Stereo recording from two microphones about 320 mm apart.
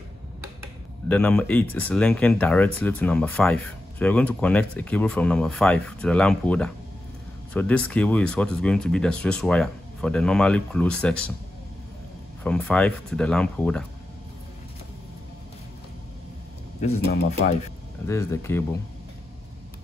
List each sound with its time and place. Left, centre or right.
1.0 s speech: centre
12.4 s speech: centre
16.8 s speech: left
18.0 s speech: centre